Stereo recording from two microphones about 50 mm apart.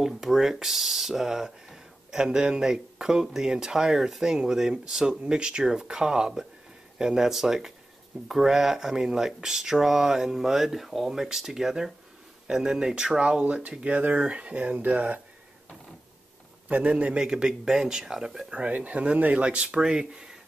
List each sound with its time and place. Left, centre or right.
0.0 s speech: centre
13.4 s speech: right
16.6 s speech: right
17.3 s speech: centre
18.5 s speech: right